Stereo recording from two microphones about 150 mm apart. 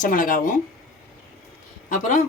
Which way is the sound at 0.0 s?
65° left (ahead or behind).